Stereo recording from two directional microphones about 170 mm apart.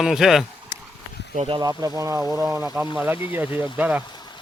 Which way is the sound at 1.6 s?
20° right (ahead or behind).